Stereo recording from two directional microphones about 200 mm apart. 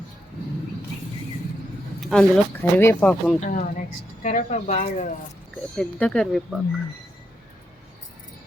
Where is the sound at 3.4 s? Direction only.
40° left (ahead or behind).